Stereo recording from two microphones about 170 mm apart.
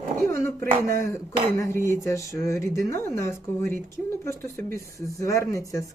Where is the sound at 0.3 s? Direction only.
15° left (ahead or behind).